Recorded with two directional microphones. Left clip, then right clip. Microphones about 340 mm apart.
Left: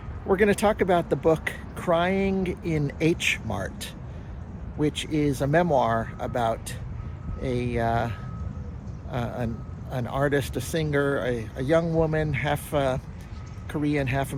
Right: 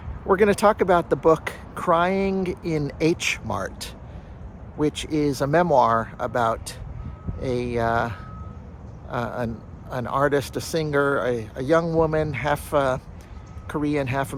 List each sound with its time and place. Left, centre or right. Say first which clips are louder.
0.3 s speech: right 4 dB; centre
4.8 s a man's voice: right 2 dB; centre